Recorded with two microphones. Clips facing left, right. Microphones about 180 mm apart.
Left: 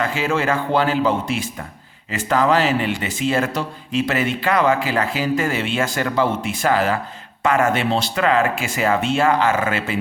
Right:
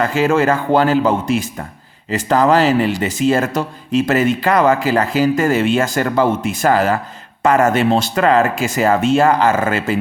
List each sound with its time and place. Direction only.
0.0 s speech: 45° right (ahead or behind)